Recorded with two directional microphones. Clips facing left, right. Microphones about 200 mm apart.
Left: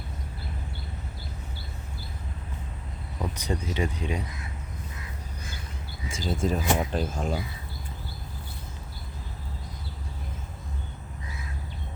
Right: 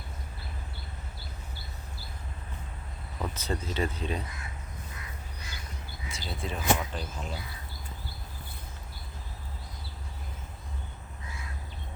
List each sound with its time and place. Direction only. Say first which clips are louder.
3.2 s speech: left 2 dB; 15° left (ahead or behind)
6.2 s speech: left 4 dB; 45° left (ahead or behind)